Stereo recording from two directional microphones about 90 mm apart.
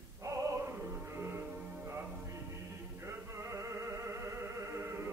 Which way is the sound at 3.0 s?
35° right (ahead or behind).